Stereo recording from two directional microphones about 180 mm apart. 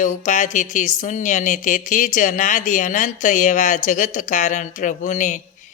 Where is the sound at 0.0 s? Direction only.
45° left (ahead or behind).